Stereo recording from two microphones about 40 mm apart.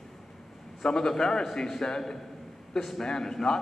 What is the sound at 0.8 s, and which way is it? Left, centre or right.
A man's voice, centre.